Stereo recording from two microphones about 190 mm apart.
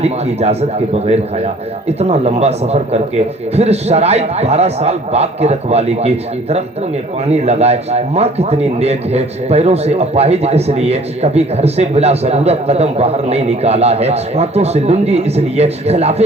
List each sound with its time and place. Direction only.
0.0 s speech: 35° right (ahead or behind)